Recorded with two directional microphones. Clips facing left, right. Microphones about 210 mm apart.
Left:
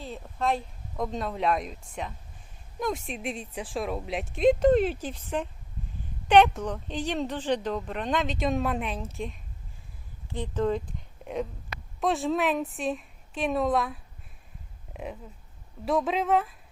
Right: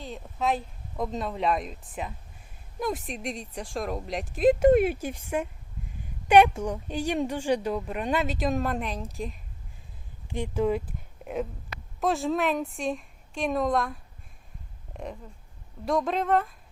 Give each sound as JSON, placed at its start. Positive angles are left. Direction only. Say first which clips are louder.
{"t": 0.0, "sound": "a woman's voice", "louder": "even", "side_deg": 0}
{"t": 10.2, "sound": "a woman's voice", "louder": "right 1 dB", "side_deg": -15}